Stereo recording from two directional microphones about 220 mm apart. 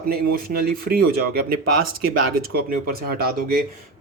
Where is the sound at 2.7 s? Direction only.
45° right (ahead or behind).